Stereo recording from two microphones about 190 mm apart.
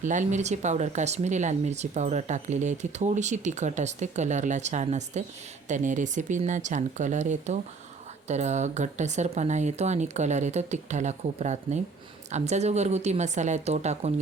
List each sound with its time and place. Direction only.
0.0 s speech: 40° right (ahead or behind)